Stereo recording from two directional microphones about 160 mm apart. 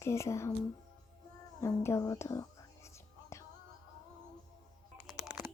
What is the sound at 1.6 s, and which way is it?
Speech, 15° left (ahead or behind).